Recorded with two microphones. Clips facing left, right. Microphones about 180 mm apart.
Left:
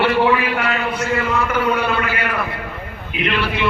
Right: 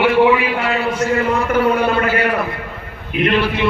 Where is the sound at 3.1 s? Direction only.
50° right (ahead or behind).